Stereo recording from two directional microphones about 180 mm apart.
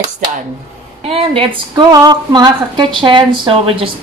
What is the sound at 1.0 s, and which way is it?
A woman's voice, 30° right (ahead or behind).